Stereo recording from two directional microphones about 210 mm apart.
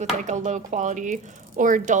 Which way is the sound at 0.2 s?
35° right (ahead or behind).